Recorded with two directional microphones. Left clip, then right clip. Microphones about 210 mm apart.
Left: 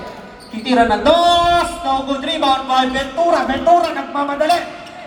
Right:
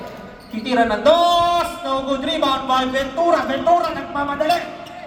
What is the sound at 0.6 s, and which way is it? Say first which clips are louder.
Speech: left 3 dB; 20° right (ahead or behind).